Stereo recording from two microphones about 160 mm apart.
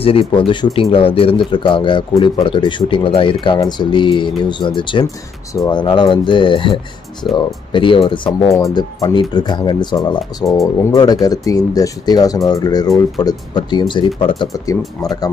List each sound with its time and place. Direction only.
0.0 s speech: 35° left (ahead or behind)
0.9 s speech: 35° left (ahead or behind)